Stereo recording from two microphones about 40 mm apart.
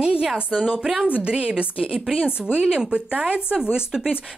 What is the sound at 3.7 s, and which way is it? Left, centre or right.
Speech, centre.